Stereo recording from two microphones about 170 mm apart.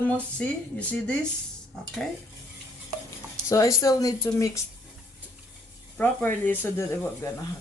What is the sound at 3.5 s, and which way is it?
Speech, 20° left (ahead or behind).